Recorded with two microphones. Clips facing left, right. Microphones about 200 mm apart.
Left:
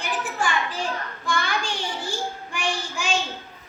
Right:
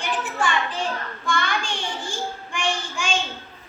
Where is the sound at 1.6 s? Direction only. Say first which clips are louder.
Left 1 dB; 40° left (ahead or behind).